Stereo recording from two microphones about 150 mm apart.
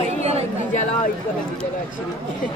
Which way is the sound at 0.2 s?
45° right (ahead or behind).